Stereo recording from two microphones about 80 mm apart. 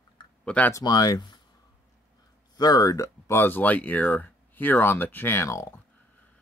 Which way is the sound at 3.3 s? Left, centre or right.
Left.